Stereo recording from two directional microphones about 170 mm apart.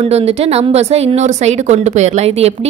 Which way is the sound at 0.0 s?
35° right (ahead or behind).